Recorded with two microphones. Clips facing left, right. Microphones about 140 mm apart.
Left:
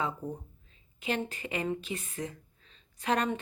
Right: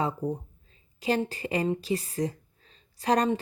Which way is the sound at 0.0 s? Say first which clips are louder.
Right 5 dB; 35° right (ahead or behind).